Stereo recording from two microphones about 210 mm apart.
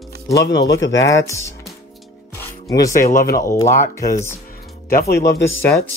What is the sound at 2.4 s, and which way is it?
Music, 15° left (ahead or behind).